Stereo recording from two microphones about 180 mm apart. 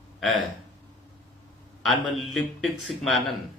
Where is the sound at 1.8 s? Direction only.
Centre (ahead or behind).